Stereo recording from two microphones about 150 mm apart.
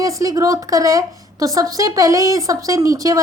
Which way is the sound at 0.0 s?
25° right (ahead or behind).